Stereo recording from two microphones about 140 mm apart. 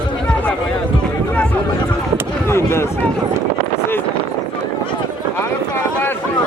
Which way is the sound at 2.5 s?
20° left (ahead or behind).